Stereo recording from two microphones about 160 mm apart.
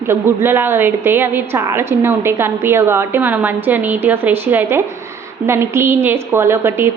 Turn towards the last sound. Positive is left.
turn(degrees=-15)  # may be behind; listen again after turning